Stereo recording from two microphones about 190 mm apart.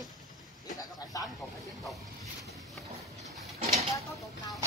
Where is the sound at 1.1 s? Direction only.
20° left (ahead or behind).